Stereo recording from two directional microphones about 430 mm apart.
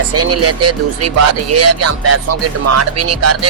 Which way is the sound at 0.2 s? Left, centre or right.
Right.